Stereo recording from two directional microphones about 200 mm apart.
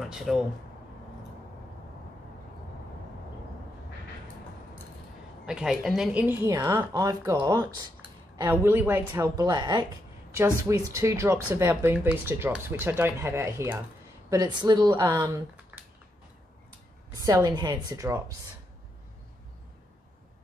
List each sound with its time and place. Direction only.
0.0 s speech: centre (ahead or behind)
5.5 s a woman's voice: 5° right (ahead or behind); by 15.4 s 20° right (ahead or behind)
15.7 s a sound: 10° right (ahead or behind)
17.2 s a woman's voice: 20° right (ahead or behind)